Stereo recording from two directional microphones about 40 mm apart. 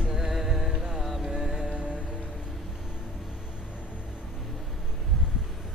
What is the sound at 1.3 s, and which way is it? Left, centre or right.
Music, right.